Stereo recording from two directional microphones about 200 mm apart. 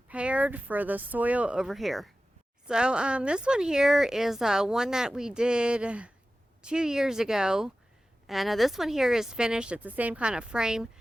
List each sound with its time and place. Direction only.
0.1 s speech: 5° right (ahead or behind)